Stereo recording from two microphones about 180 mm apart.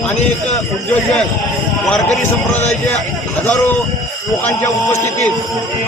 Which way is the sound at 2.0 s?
40° left (ahead or behind).